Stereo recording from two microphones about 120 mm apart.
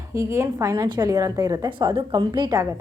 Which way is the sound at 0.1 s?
25° right (ahead or behind).